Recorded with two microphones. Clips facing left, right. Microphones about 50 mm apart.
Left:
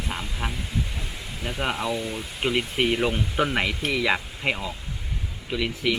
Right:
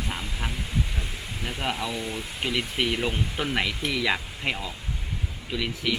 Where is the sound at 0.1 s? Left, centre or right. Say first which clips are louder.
Left 2 dB; centre.